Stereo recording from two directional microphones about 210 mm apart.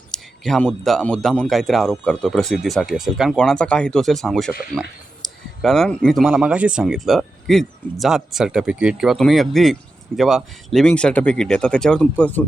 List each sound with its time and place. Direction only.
0.1 s speech: centre (ahead or behind)